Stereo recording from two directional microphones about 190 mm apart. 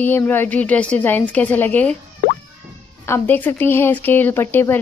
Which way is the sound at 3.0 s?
10° left (ahead or behind).